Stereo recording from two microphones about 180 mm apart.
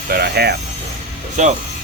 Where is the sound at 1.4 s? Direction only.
45° right (ahead or behind).